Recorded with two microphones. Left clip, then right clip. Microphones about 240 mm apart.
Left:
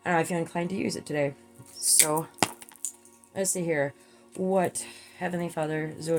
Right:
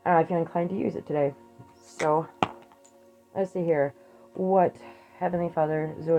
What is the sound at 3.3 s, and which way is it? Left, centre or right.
Speech, left.